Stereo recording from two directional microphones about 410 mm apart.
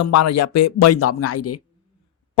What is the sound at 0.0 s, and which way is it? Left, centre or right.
Speech, left.